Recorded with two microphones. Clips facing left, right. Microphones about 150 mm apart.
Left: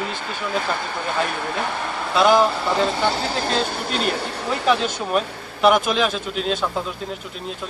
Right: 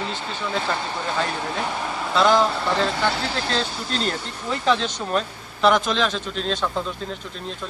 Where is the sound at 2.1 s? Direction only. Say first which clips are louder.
Left 2 dB; 10° left (ahead or behind).